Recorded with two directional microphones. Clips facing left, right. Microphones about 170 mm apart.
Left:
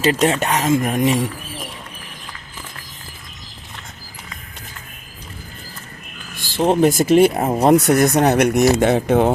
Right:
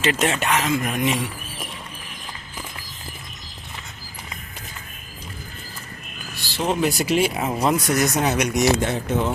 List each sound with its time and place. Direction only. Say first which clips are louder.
0.0 s speech: left 5 dB; 35° left (ahead or behind)
6.3 s speech: left 7 dB; 50° left (ahead or behind)
8.8 s speech: left 8 dB; 65° left (ahead or behind)